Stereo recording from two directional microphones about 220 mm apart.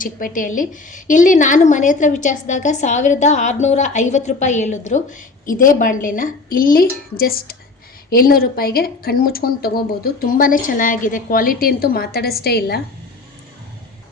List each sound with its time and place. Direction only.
0.0 s a woman's voice: 40° left (ahead or behind)